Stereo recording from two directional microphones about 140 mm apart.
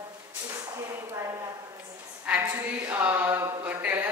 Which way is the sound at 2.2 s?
10° right (ahead or behind).